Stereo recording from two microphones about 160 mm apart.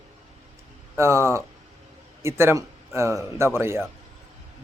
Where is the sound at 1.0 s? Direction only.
15° right (ahead or behind).